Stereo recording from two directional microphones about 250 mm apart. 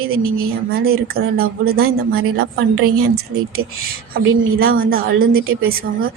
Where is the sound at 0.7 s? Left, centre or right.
Right.